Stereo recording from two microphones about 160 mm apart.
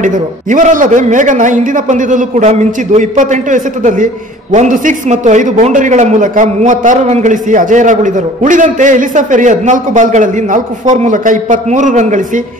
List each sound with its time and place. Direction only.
0.0 s a man's voice: 50° right (ahead or behind)